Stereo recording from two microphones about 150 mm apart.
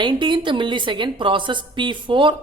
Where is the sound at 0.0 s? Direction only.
35° right (ahead or behind).